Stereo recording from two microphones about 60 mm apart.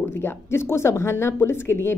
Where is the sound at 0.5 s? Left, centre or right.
Left.